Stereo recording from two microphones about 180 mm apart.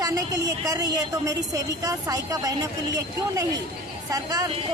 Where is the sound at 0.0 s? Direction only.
20° right (ahead or behind).